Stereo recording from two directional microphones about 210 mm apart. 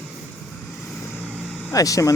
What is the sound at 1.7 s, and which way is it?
Speech, 15° left (ahead or behind).